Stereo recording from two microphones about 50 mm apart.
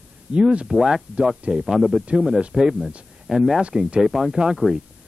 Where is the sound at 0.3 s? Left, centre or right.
Right.